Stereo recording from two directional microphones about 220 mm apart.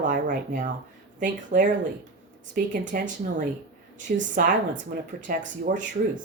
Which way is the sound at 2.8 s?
35° right (ahead or behind).